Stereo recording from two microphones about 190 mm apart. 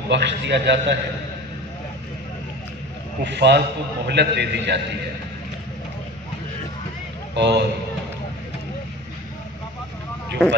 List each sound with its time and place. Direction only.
0.1 s a man's voice: 65° right (ahead or behind)
3.3 s a man's voice: 65° right (ahead or behind)
7.3 s a man's voice: 65° right (ahead or behind)